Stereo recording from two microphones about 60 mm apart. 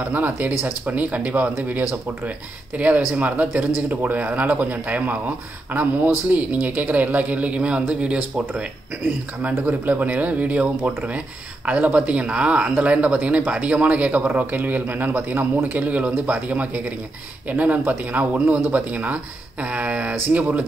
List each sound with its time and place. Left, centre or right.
0.1 s speech: right
9.6 s speech: right
15.8 s speech: right